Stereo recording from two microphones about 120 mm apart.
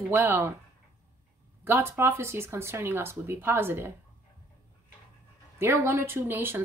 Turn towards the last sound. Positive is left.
turn(degrees=-20)  # may be behind; listen again after turning